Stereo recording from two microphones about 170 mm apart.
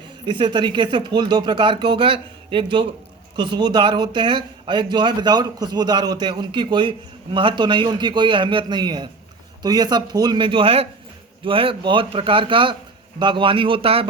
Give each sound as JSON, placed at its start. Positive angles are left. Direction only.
{"t": 0.3, "sound": "a man's voice", "side_deg": -30}